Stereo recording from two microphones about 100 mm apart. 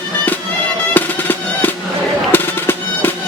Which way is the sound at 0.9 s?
20° left (ahead or behind).